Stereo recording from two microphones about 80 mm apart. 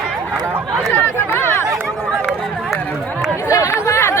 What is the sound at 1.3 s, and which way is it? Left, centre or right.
Chatter, left.